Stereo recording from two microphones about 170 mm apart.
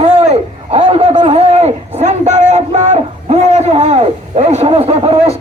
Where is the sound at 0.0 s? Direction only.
35° right (ahead or behind).